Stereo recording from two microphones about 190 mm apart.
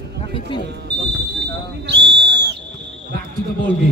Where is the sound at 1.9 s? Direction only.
65° right (ahead or behind).